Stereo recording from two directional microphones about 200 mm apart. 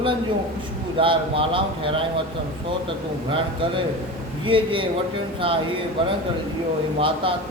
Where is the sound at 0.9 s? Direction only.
25° right (ahead or behind).